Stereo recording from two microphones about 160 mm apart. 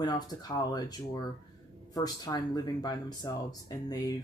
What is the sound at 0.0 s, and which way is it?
Speech, 25° left (ahead or behind).